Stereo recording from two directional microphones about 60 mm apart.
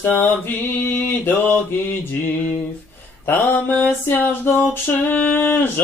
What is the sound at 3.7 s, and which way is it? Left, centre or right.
Music, left.